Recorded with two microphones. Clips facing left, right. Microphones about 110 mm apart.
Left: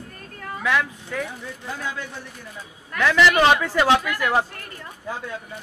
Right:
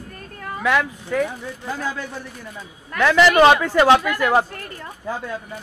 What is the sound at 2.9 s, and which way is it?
A man's voice, 50° right (ahead or behind).